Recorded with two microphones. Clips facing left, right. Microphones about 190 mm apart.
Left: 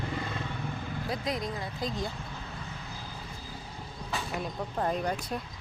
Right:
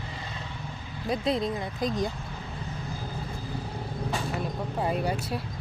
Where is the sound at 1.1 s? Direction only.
25° right (ahead or behind).